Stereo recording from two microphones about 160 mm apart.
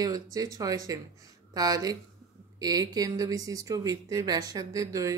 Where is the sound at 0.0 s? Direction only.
20° right (ahead or behind).